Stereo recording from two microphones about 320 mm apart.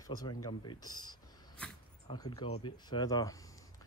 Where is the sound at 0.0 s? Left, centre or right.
Centre.